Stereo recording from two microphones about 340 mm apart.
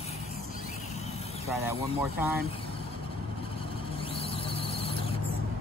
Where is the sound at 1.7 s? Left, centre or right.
Centre.